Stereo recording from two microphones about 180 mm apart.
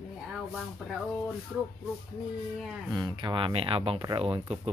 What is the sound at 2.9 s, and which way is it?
Speech, 25° right (ahead or behind).